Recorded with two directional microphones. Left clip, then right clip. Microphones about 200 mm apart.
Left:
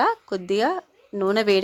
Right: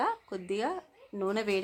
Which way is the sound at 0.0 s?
35° left (ahead or behind).